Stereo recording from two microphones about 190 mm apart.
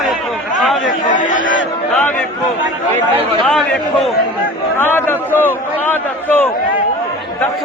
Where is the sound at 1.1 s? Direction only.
40° left (ahead or behind).